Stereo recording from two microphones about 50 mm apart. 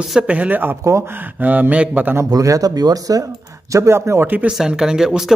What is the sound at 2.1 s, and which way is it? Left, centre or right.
Speech, right.